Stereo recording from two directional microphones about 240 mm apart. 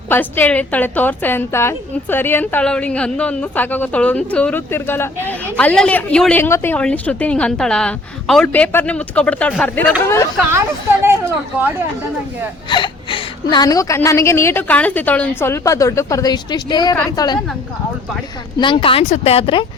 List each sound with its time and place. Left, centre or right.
0.1 s a woman's voice: centre
11.0 s speech: centre
12.6 s a woman's voice: centre
18.6 s speech: left